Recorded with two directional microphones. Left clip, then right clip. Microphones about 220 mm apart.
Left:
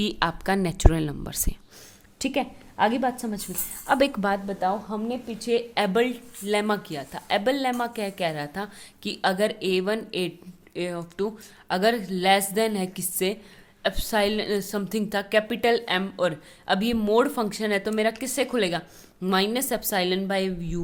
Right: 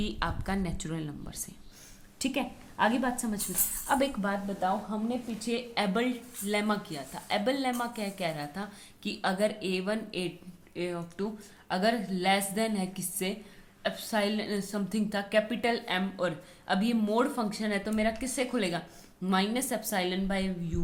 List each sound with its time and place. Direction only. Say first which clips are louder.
0.0 s a woman's voice: left 8 dB; 45° left (ahead or behind)